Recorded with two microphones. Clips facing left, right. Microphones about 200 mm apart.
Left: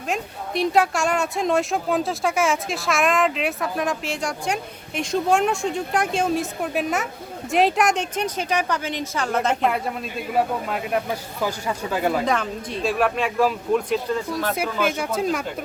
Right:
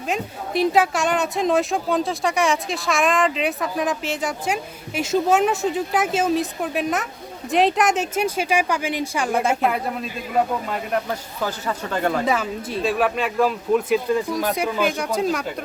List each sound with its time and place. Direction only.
0.1 s speech: centre (ahead or behind)
12.2 s speech: 5° right (ahead or behind)
14.1 s speech: 15° right (ahead or behind)
14.5 s speech: centre (ahead or behind)